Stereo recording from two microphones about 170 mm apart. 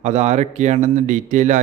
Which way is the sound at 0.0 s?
40° right (ahead or behind).